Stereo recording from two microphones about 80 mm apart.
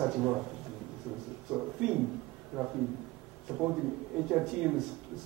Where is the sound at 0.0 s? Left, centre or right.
Centre.